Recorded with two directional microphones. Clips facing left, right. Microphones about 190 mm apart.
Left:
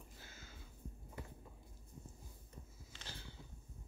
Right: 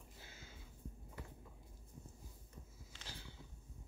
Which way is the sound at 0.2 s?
30° right (ahead or behind).